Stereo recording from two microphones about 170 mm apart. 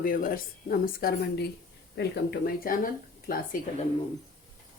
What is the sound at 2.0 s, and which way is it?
Speech, 75° left (ahead or behind).